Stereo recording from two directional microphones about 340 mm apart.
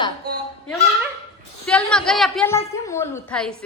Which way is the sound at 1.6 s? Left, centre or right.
Centre.